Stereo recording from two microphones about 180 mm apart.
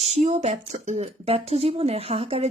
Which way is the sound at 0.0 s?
35° right (ahead or behind).